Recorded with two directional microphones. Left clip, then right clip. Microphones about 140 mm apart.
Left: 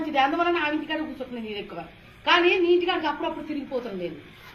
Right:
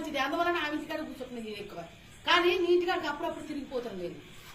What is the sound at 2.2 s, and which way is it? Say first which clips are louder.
A woman's voice: left 6 dB; 45° right (ahead or behind).